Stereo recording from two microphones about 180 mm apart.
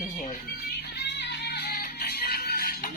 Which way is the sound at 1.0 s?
70° left (ahead or behind).